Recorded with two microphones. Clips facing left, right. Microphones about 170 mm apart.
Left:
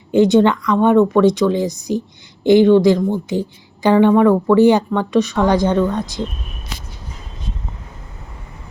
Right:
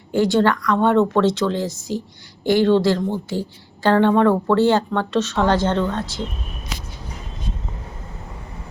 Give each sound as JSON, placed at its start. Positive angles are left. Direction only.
{"t": 0.1, "sound": "speech", "side_deg": 20}